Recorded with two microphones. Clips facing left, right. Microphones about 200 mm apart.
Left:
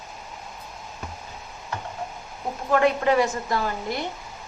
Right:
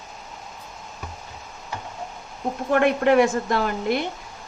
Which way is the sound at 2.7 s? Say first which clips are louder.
Right 2 dB; 60° right (ahead or behind).